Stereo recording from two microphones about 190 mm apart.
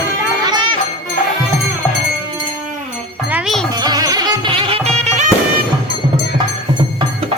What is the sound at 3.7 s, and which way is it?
Music, 20° right (ahead or behind).